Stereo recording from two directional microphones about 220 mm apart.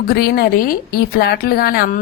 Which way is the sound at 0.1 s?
45° left (ahead or behind).